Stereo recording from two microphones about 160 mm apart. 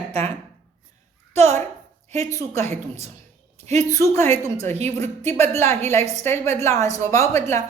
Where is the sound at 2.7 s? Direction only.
40° right (ahead or behind).